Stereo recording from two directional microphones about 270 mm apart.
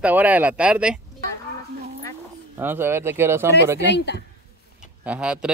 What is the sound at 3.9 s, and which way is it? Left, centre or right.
Speech, left.